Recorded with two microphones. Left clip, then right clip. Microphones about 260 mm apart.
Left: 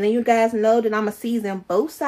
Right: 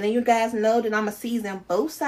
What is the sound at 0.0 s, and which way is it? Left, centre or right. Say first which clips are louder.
A woman's voice: left 3 dB; left.